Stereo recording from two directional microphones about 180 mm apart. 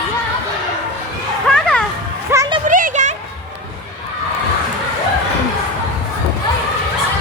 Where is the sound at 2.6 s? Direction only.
45° right (ahead or behind).